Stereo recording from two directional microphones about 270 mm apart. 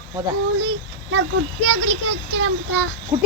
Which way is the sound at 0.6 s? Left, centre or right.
Right.